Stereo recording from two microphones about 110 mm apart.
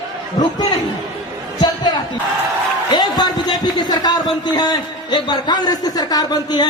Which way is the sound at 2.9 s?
40° left (ahead or behind).